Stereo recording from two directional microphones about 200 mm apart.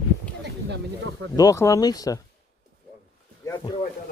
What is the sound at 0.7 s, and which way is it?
Speech, 75° right (ahead or behind).